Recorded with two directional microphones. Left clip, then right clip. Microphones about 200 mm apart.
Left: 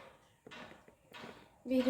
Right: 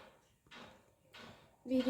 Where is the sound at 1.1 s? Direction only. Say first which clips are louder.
Left 4 dB; 20° left (ahead or behind).